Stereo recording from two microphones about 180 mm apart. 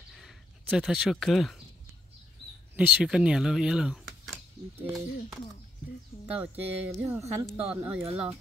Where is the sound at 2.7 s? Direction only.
5° right (ahead or behind).